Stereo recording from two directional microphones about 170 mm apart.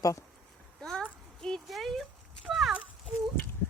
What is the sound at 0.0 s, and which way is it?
Speech, 20° left (ahead or behind).